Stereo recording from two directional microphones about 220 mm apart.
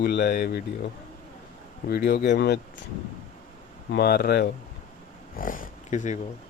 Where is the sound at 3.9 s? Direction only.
45° left (ahead or behind).